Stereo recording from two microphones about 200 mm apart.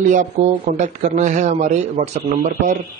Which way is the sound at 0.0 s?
40° right (ahead or behind).